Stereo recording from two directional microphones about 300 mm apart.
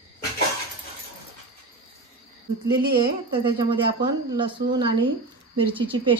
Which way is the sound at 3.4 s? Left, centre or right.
Centre.